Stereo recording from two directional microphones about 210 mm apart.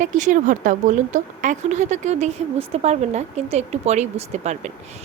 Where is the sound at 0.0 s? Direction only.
35° right (ahead or behind).